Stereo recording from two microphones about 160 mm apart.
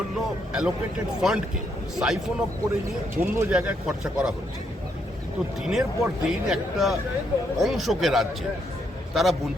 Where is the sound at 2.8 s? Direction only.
15° right (ahead or behind).